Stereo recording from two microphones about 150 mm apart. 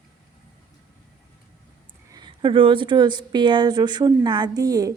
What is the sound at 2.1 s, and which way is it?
A woman's voice, 30° right (ahead or behind).